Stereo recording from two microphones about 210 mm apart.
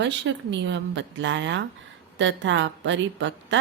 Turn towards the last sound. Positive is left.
turn(degrees=-60)  # may be behind; listen again after turning